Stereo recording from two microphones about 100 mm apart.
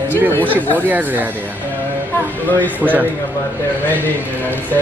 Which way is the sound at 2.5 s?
15° left (ahead or behind).